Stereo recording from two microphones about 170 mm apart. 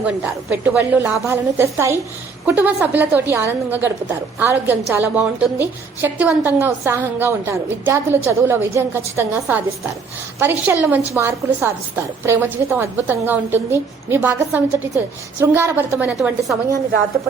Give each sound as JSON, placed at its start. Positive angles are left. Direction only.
{"t": 0.5, "sound": "a woman's voice", "side_deg": -10}